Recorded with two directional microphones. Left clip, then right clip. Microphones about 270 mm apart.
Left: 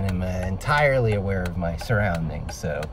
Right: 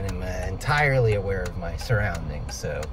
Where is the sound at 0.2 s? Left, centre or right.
Centre.